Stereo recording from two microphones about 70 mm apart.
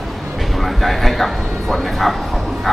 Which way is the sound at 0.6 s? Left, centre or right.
Centre.